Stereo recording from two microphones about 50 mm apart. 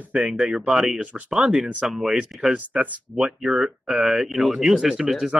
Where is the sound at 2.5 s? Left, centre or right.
Right.